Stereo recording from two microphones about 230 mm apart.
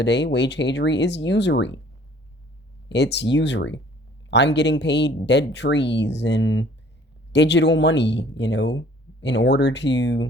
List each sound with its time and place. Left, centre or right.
0.0 s speech: left
2.9 s speech: left